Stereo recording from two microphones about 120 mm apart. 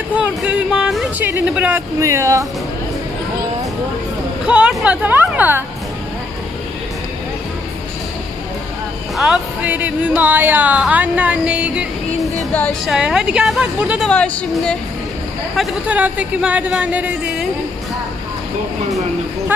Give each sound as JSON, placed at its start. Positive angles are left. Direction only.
{"t": 0.2, "sound": "a sound", "side_deg": -10}
{"t": 1.7, "sound": "speech", "side_deg": -25}
{"t": 4.5, "sound": "speech", "side_deg": -10}
{"t": 9.1, "sound": "a woman's voice", "side_deg": -5}
{"t": 14.0, "sound": "a woman's voice", "side_deg": 5}